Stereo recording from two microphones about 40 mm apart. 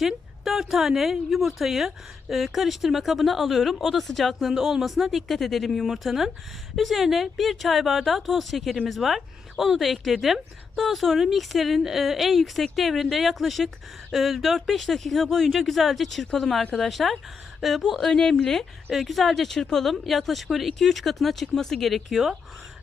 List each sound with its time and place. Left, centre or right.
0.0 s a woman's voice: centre
18.0 s a woman's voice: centre
18.9 s speech: centre